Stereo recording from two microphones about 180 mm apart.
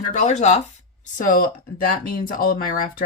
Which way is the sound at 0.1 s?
40° left (ahead or behind).